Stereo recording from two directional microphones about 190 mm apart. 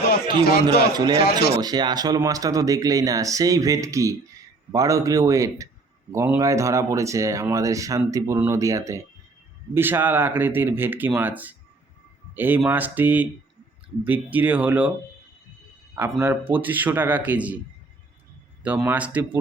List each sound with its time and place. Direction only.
0.3 s a man's voice: 50° left (ahead or behind)
0.9 s speech: 20° right (ahead or behind)
16.2 s speech: 10° right (ahead or behind)
18.6 s speech: 10° right (ahead or behind)